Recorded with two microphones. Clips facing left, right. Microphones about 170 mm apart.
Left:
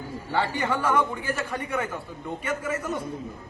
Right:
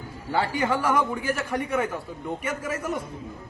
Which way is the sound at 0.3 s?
10° right (ahead or behind).